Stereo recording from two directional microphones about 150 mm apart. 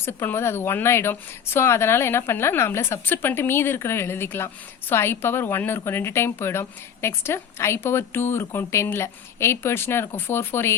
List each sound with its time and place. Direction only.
0.0 s a woman's voice: 15° left (ahead or behind)